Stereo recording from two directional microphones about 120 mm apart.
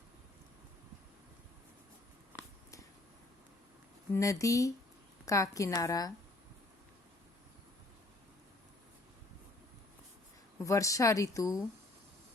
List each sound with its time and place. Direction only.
4.1 s a woman's voice: 25° left (ahead or behind)
10.6 s a woman's voice: 25° left (ahead or behind)